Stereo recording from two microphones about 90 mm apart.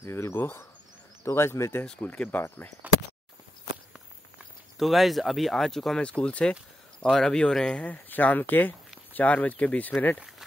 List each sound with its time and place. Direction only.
0.0 s speech: 30° left (ahead or behind)
1.9 s speech: 15° left (ahead or behind)
2.8 s a sound: 20° right (ahead or behind)
4.7 s speech: centre (ahead or behind); by 9.9 s 15° left (ahead or behind)